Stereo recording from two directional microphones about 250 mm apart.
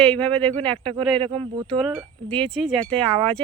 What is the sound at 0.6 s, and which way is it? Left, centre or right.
Speech, centre.